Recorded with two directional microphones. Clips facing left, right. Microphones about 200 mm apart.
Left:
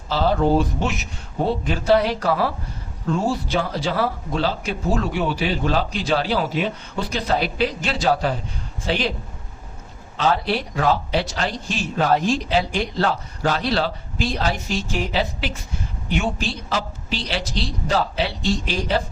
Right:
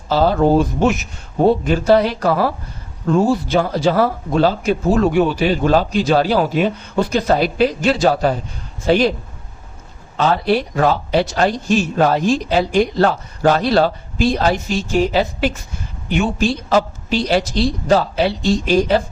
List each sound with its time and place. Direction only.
0.1 s speech: 45° right (ahead or behind)
10.2 s speech: 50° right (ahead or behind)